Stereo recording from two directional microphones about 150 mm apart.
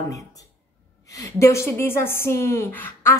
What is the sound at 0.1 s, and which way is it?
A woman's voice, 20° left (ahead or behind).